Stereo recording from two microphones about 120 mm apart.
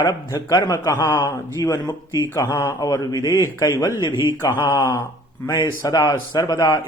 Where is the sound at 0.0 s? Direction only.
30° left (ahead or behind).